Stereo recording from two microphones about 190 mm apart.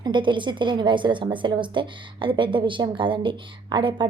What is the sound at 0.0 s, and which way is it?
A woman's voice, 25° right (ahead or behind).